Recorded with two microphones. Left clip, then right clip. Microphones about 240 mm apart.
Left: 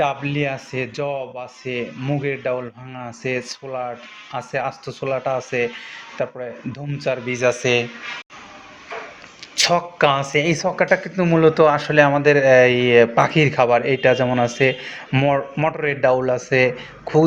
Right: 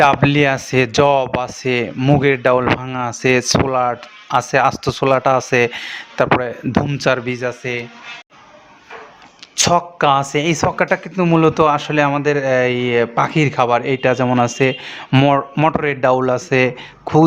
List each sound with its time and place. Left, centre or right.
0.0 s speech: right
7.6 s speech: centre
9.6 s a man's voice: right